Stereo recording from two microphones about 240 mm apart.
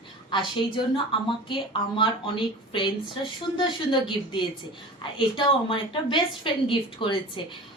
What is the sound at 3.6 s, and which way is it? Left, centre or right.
A woman's voice, centre.